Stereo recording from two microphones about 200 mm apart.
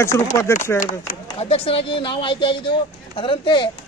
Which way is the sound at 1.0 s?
30° left (ahead or behind).